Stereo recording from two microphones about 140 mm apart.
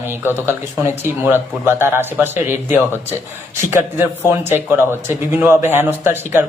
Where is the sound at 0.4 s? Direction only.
15° right (ahead or behind).